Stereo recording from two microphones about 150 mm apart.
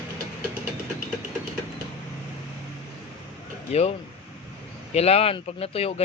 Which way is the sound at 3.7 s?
45° left (ahead or behind).